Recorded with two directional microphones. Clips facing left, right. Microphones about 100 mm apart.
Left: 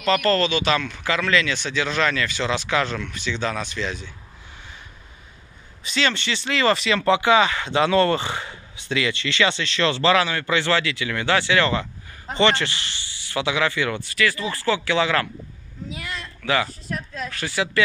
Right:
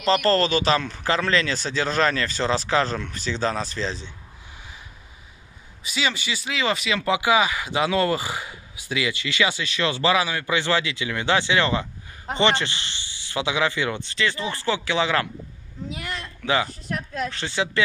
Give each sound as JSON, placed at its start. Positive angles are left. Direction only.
{"t": 0.0, "sound": "speech", "side_deg": -30}
{"t": 5.9, "sound": "speech", "side_deg": -10}
{"t": 16.4, "sound": "speech", "side_deg": -15}
{"t": 16.9, "sound": "speech", "side_deg": -55}
{"t": 17.3, "sound": "speech", "side_deg": -20}